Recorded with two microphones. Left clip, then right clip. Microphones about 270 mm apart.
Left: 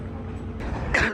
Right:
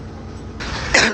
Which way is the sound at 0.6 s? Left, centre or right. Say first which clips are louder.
Right 8 dB; left.